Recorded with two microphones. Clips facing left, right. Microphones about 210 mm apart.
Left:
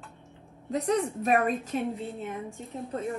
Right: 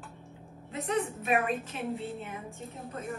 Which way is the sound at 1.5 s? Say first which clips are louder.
Left 4 dB; centre (ahead or behind).